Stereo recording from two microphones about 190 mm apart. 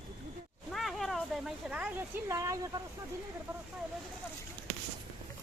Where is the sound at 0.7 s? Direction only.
Centre (ahead or behind); by 2.8 s 15° right (ahead or behind).